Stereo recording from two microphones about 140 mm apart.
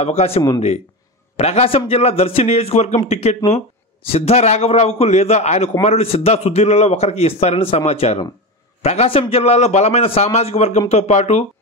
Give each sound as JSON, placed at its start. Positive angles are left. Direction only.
{"t": 0.0, "sound": "a man's voice", "side_deg": 50}